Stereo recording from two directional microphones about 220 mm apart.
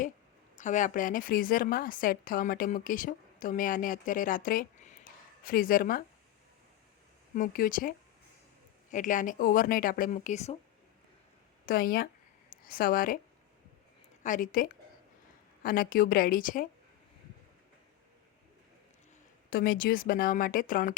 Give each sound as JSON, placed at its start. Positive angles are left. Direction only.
{"t": 0.5, "sound": "a woman's voice", "side_deg": 35}
{"t": 7.3, "sound": "a woman's voice", "side_deg": 40}
{"t": 11.6, "sound": "speech", "side_deg": 40}
{"t": 14.3, "sound": "a woman's voice", "side_deg": 35}
{"t": 19.5, "sound": "a woman's voice", "side_deg": 40}